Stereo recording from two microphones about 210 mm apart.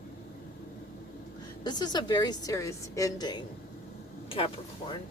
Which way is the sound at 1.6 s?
20° left (ahead or behind).